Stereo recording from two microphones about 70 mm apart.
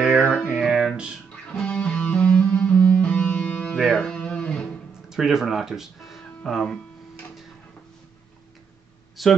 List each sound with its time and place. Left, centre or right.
0.2 s music: left
0.7 s music: centre
1.3 s music: centre
3.7 s music: centre
4.0 s guitar: centre
5.1 s speech: centre
9.2 s speech: centre